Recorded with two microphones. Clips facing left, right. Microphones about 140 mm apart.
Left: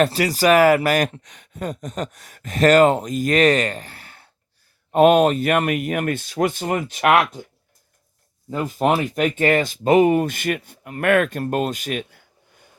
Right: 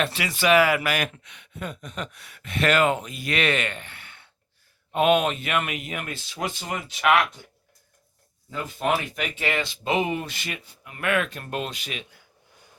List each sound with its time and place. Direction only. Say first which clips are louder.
0.0 s speech: left 7 dB; 40° left (ahead or behind)
8.4 s speech: left 6 dB; 45° left (ahead or behind)